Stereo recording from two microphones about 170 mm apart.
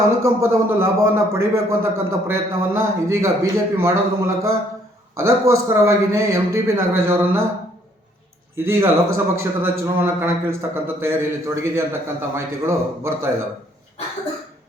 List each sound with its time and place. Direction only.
0.2 s a man's voice: 15° right (ahead or behind)
5.1 s a man's voice: 15° right (ahead or behind)
8.5 s a man's voice: 15° right (ahead or behind)